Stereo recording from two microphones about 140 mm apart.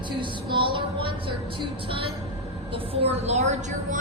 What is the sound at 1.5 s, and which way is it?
A woman's voice, 35° right (ahead or behind).